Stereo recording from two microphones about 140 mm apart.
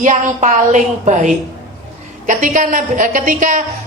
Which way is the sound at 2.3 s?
70° right (ahead or behind).